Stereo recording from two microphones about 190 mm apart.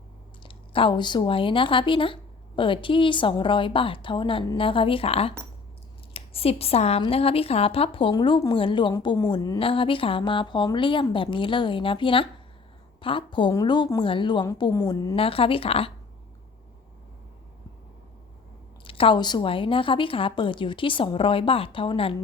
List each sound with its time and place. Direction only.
0.4 s speech: 25° left (ahead or behind)
18.9 s speech: 30° left (ahead or behind)